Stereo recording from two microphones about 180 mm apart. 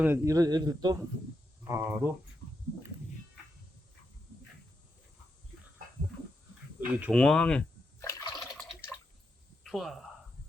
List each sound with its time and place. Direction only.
0.0 s a man's voice: 15° right (ahead or behind)
6.7 s speech: 10° right (ahead or behind)
7.1 s water: 5° left (ahead or behind); by 8.5 s 20° left (ahead or behind)
9.6 s speech: centre (ahead or behind)